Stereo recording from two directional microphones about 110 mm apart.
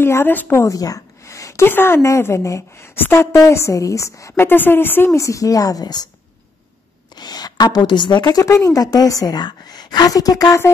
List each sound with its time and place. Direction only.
0.0 s a woman's voice: 20° left (ahead or behind); by 6.0 s 35° left (ahead or behind)
7.2 s a woman's voice: 40° left (ahead or behind)